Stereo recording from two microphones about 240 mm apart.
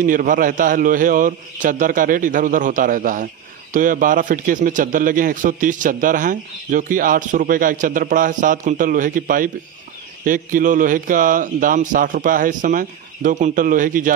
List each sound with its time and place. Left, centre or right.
0.0 s a man's voice: right